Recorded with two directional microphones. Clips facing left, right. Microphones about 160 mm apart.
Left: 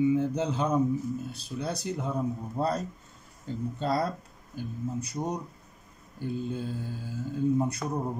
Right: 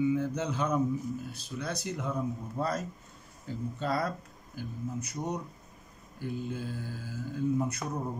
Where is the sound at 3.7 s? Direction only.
35° left (ahead or behind).